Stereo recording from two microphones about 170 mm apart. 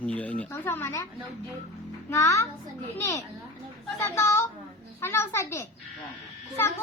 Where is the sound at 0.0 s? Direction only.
5° left (ahead or behind).